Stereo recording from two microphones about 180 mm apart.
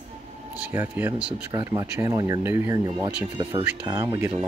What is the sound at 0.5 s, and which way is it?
Speech, 10° right (ahead or behind).